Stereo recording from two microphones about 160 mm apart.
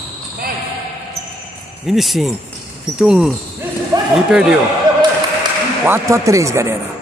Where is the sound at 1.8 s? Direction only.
Centre (ahead or behind).